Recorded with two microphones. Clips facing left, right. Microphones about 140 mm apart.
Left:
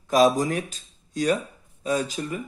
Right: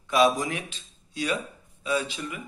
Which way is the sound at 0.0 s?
40° left (ahead or behind).